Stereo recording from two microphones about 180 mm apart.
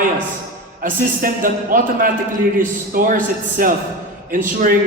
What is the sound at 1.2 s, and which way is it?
A man's voice, 50° right (ahead or behind).